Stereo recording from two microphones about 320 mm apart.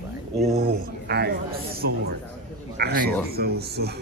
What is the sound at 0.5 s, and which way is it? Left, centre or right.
Speech, right.